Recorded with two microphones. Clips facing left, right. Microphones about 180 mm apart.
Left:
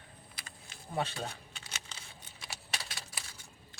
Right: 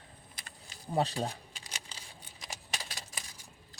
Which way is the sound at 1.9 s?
35° right (ahead or behind).